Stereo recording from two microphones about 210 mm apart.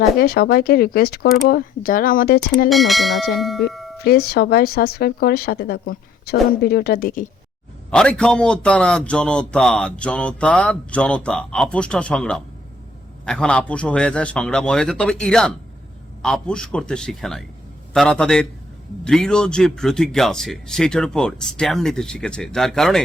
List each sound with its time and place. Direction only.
0.2 s speech: 45° left (ahead or behind)
2.6 s a man's voice: centre (ahead or behind)
3.7 s music: centre (ahead or behind)
3.9 s speech: 50° left (ahead or behind)
7.9 s a man's voice: 5° left (ahead or behind)